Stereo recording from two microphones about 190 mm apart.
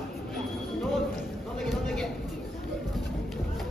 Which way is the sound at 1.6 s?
Centre (ahead or behind).